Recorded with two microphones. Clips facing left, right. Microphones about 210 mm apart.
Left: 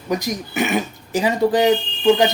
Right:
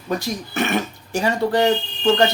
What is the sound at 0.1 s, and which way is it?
Speech, 20° left (ahead or behind).